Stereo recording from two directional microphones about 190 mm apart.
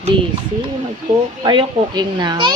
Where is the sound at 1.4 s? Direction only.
25° right (ahead or behind).